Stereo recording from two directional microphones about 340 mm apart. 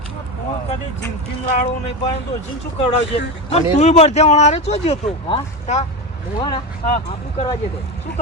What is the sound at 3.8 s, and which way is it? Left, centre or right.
Speech, centre.